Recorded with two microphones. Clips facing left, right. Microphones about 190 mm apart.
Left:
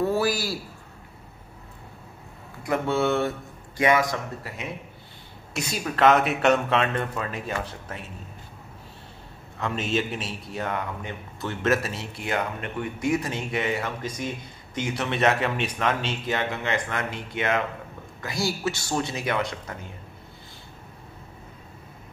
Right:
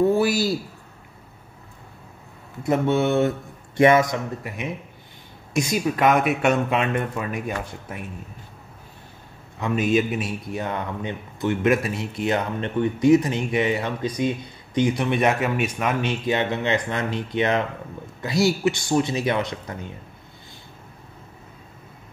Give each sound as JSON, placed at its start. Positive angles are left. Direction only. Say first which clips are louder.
{"t": 0.0, "sound": "a man's voice", "louder": "right 5 dB", "side_deg": -20}
{"t": 2.6, "sound": "speech", "louder": "right 4 dB", "side_deg": -20}
{"t": 9.6, "sound": "speech", "louder": "right 6 dB", "side_deg": -10}